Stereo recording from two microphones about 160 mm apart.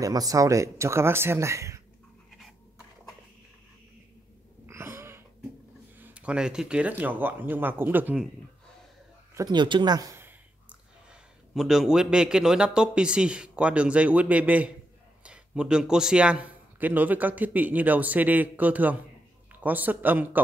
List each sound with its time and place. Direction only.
0.0 s speech: 20° right (ahead or behind)
4.6 s a sound: 15° right (ahead or behind)
5.9 s a man's voice: 10° right (ahead or behind)
9.3 s a man's voice: 25° right (ahead or behind)